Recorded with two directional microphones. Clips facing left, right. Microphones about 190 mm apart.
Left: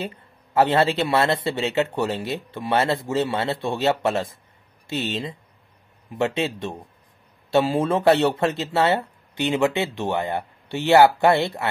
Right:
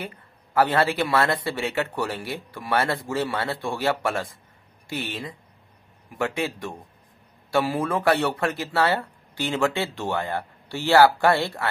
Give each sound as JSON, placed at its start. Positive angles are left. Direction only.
{"t": 0.6, "sound": "speech", "side_deg": 25}